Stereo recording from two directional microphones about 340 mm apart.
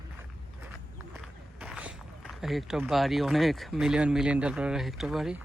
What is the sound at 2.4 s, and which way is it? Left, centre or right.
Speech, centre.